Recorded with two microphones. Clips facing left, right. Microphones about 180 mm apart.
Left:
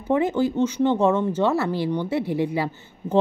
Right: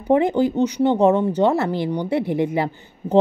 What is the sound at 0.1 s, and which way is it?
A woman's voice, 20° right (ahead or behind).